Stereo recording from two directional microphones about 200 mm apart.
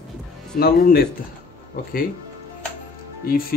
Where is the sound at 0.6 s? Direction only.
50° left (ahead or behind).